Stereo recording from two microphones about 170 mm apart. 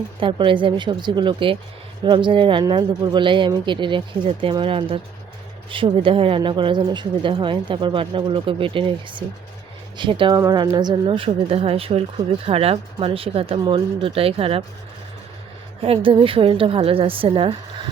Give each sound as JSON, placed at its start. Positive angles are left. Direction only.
{"t": 0.2, "sound": "speech", "side_deg": -30}
{"t": 15.8, "sound": "speech", "side_deg": -30}